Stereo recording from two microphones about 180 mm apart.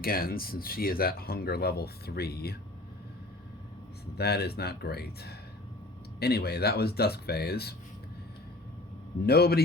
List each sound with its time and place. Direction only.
0.0 s speech: 55° left (ahead or behind)
4.2 s speech: 60° left (ahead or behind)
9.2 s speech: 60° left (ahead or behind)